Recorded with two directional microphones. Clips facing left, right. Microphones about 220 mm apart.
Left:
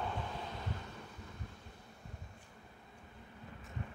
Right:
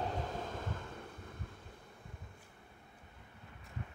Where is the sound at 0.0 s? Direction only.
40° right (ahead or behind).